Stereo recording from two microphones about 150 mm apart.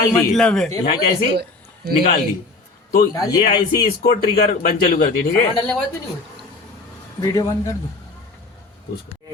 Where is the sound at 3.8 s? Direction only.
75° left (ahead or behind).